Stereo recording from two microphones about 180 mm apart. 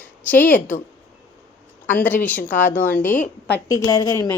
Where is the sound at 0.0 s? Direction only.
10° left (ahead or behind).